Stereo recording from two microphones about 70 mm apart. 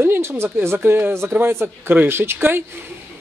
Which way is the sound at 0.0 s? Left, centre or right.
Right.